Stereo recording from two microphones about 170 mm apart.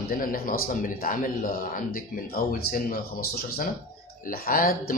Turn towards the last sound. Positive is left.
turn(degrees=55)  # may be behind; listen again after turning